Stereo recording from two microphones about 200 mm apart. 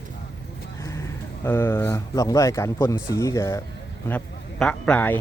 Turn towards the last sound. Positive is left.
turn(degrees=10)  # may be behind; listen again after turning